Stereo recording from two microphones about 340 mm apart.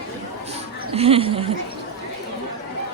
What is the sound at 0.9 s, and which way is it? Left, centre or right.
Speech, centre.